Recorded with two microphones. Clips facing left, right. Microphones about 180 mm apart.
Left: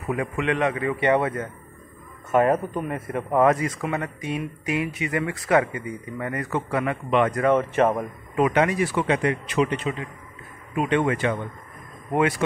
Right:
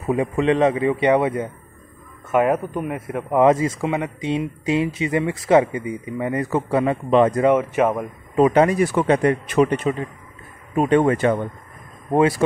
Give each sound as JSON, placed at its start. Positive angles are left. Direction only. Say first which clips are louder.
{"t": 0.0, "sound": "speech", "louder": "right 6 dB", "side_deg": -30}
{"t": 2.3, "sound": "speech", "louder": "right 1 dB", "side_deg": -5}
{"t": 3.3, "sound": "speech", "louder": "right 4 dB", "side_deg": -20}
{"t": 7.5, "sound": "speech", "louder": "right 2 dB", "side_deg": -5}
{"t": 8.4, "sound": "speech", "louder": "right 5 dB", "side_deg": -30}
{"t": 12.1, "sound": "speech", "louder": "right 5 dB", "side_deg": -30}